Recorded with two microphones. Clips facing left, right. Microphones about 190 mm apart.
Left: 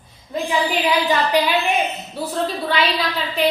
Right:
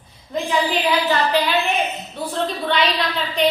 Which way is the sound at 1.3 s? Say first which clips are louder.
Left 1 dB; 15° left (ahead or behind).